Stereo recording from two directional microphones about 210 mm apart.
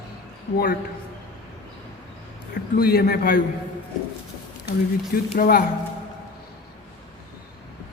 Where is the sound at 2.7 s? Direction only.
45° left (ahead or behind).